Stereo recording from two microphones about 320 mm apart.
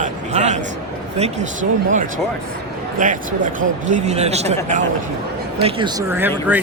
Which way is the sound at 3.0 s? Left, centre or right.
Right.